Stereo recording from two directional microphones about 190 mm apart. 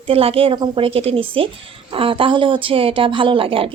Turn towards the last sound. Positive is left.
turn(degrees=-30)  # may be behind; listen again after turning